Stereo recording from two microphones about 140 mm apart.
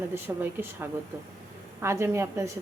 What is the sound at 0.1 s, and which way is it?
A woman's voice, 15° right (ahead or behind).